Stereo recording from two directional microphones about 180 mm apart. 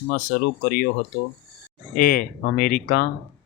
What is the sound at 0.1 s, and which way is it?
Speech, 50° left (ahead or behind).